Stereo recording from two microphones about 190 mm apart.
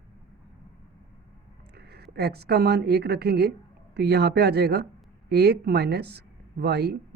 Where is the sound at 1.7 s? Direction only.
60° right (ahead or behind).